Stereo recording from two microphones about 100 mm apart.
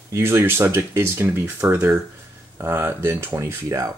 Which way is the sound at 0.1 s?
25° right (ahead or behind).